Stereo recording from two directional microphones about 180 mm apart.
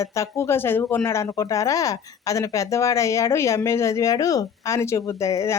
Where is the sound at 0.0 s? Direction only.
15° left (ahead or behind).